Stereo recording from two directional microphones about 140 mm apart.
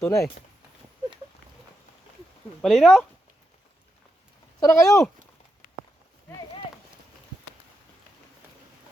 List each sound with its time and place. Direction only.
0.0 s speech: 20° left (ahead or behind)
2.6 s speech: centre (ahead or behind)
4.6 s speech: 25° left (ahead or behind)